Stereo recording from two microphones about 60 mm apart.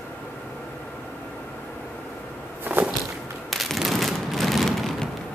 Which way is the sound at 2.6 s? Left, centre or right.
Right.